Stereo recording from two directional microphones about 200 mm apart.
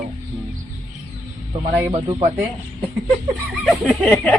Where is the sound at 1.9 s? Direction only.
25° right (ahead or behind).